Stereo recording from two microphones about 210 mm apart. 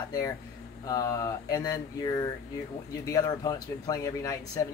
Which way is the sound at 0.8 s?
15° left (ahead or behind).